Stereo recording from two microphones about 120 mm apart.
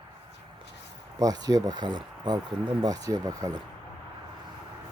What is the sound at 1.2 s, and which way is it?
Speech, 30° right (ahead or behind).